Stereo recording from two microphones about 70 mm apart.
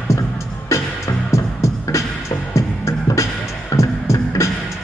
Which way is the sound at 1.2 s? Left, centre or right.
Left.